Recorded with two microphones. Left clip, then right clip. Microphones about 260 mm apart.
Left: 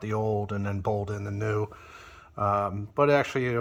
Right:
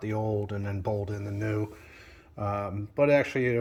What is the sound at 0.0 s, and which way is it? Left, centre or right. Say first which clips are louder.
Speech: left 2 dB; centre.